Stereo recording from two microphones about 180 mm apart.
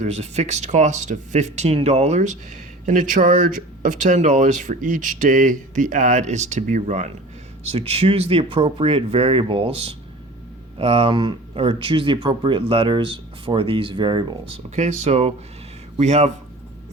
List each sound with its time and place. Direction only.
0.0 s speech: 40° right (ahead or behind)
14.8 s speech: 40° right (ahead or behind)